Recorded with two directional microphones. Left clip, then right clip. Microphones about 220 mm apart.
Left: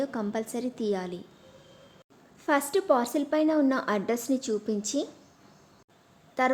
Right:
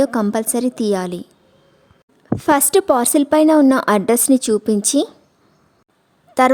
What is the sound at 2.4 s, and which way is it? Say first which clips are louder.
A woman's voice: right 11 dB; 50° right (ahead or behind).